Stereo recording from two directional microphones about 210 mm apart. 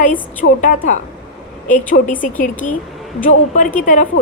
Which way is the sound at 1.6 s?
40° left (ahead or behind).